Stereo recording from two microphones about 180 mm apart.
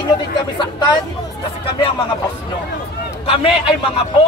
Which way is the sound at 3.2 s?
30° left (ahead or behind).